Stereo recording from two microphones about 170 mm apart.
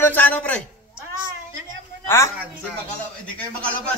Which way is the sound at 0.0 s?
10° left (ahead or behind).